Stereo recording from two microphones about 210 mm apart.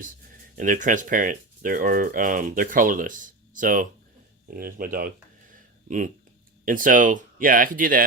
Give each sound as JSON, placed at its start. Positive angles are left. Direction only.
{"t": 0.5, "sound": "speech", "side_deg": -40}
{"t": 6.7, "sound": "speech", "side_deg": -40}